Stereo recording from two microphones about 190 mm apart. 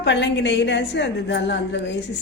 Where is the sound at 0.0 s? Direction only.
65° left (ahead or behind).